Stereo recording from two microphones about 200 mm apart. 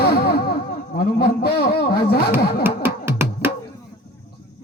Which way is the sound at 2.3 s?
10° right (ahead or behind).